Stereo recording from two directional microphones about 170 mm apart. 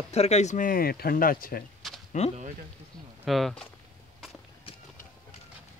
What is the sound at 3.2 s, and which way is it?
Speech, centre (ahead or behind).